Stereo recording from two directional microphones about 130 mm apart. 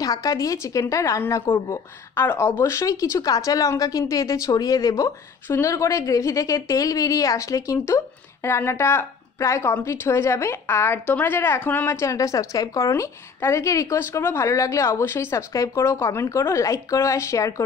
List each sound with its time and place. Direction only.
0.0 s a woman's voice: 25° left (ahead or behind)